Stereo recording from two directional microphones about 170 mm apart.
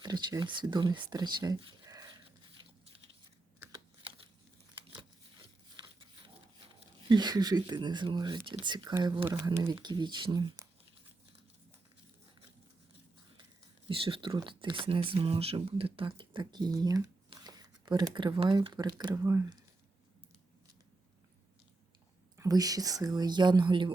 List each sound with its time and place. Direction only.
0.0 s speech: 25° right (ahead or behind)
2.6 s biting: 30° right (ahead or behind)
5.7 s a sound: 30° right (ahead or behind)
7.1 s speech: 25° right (ahead or behind)
13.8 s speech: 30° right (ahead or behind)
22.4 s speech: 20° right (ahead or behind)